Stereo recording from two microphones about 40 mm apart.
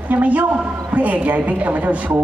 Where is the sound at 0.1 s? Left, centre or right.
Right.